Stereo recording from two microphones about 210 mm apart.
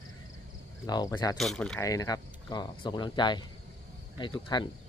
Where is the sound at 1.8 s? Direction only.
15° left (ahead or behind).